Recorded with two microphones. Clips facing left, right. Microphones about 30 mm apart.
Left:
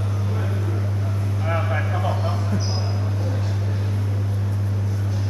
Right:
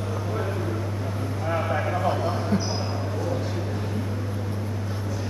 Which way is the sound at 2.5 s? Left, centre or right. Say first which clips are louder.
Right 2 dB; right.